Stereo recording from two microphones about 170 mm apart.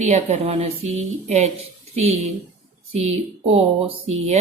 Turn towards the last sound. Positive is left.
turn(degrees=-35)  # may be behind; listen again after turning